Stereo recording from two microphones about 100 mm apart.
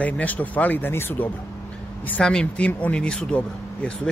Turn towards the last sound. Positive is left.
turn(degrees=10)  # may be behind; listen again after turning